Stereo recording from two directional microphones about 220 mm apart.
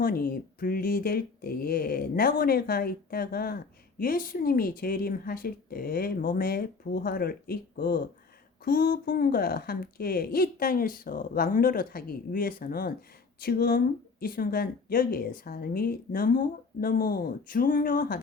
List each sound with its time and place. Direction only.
0.0 s speech: 40° left (ahead or behind)